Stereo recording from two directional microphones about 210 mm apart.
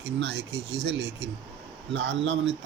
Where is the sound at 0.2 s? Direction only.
55° right (ahead or behind).